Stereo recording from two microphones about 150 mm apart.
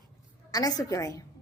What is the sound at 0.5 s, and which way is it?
Speech, 25° left (ahead or behind).